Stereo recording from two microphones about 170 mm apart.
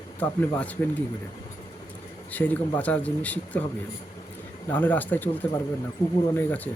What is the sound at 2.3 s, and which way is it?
Speech, 10° left (ahead or behind).